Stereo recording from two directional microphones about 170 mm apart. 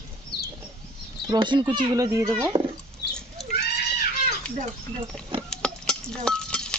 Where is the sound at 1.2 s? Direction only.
25° right (ahead or behind).